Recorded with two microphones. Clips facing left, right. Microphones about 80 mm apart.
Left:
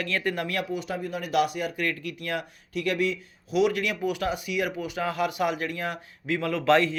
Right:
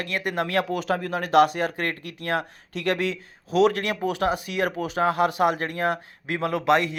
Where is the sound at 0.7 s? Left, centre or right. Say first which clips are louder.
Right 5 dB; right.